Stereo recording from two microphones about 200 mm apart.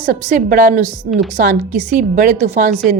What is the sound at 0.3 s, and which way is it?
Speech, 40° right (ahead or behind).